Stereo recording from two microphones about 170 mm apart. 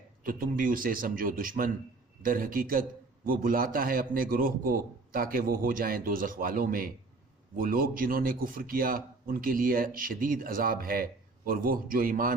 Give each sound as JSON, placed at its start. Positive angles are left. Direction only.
{"t": 0.2, "sound": "a man's voice", "side_deg": -55}